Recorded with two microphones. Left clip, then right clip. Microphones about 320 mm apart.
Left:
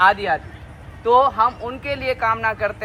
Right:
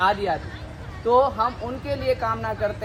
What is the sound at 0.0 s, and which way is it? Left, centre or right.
Speech, centre.